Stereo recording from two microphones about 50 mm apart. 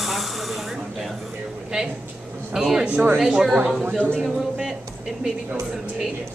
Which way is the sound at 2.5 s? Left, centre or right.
Centre.